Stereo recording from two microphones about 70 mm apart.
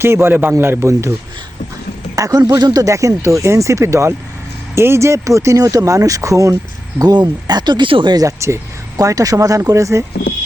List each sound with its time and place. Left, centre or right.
0.0 s a man's voice: right
2.1 s speech: right
2.8 s speech: right
7.0 s speech: right
9.0 s a man's voice: right